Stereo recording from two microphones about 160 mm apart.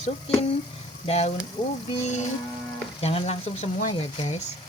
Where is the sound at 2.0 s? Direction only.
50° left (ahead or behind).